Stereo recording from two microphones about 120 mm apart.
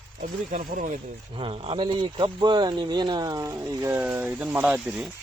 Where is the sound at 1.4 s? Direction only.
50° right (ahead or behind); by 3.4 s 30° right (ahead or behind).